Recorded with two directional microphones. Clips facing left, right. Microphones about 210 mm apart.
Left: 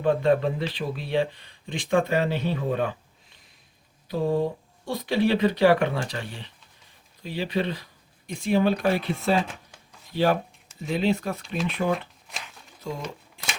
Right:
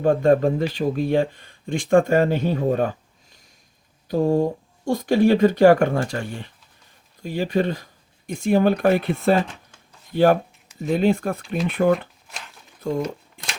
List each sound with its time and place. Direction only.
0.0 s speech: 45° right (ahead or behind)
4.1 s speech: 45° right (ahead or behind)
12.8 s a sound: 55° right (ahead or behind)